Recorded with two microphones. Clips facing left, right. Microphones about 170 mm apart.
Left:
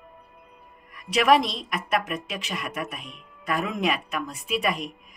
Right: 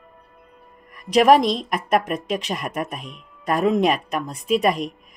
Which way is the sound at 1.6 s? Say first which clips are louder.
Right 6 dB; 45° right (ahead or behind).